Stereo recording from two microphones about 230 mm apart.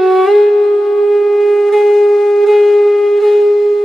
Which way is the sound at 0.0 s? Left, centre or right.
Centre.